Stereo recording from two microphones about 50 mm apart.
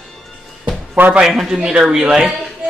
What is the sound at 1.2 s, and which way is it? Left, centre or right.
Speech, centre.